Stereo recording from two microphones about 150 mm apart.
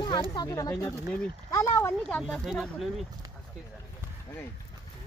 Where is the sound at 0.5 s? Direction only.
20° left (ahead or behind); by 3.1 s centre (ahead or behind).